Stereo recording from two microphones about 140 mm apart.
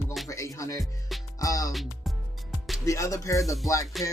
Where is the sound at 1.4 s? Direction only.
25° left (ahead or behind).